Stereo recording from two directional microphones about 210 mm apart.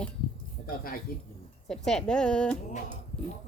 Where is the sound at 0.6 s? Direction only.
40° left (ahead or behind).